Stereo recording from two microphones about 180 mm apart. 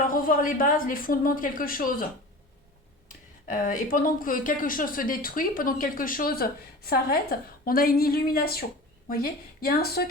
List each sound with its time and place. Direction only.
0.0 s a woman's voice: 50° left (ahead or behind)
3.4 s a woman's voice: 45° left (ahead or behind)